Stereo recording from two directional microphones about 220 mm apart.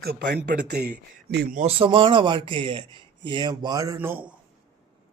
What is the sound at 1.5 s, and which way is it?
A man's voice, 25° right (ahead or behind).